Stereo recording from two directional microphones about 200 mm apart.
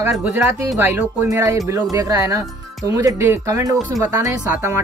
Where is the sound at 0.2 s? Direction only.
15° right (ahead or behind).